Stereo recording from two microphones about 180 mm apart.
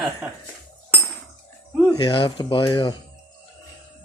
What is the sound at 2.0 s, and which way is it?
Speech, 30° left (ahead or behind).